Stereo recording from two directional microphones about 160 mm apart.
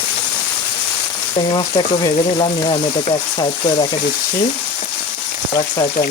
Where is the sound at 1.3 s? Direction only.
30° left (ahead or behind).